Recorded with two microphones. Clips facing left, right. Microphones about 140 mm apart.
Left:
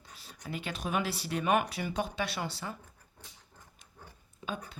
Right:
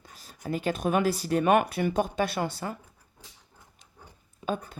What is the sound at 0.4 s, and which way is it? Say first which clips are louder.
Speech: right 9 dB; 45° right (ahead or behind).